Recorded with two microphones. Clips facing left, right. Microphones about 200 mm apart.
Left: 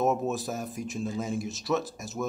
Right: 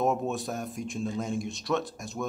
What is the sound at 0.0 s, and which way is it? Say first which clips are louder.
Speech: left 1 dB; centre (ahead or behind).